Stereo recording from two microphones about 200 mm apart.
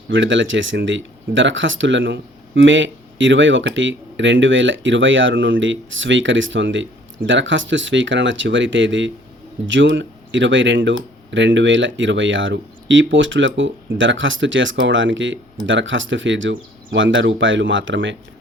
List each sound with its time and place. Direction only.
0.1 s speech: 65° right (ahead or behind)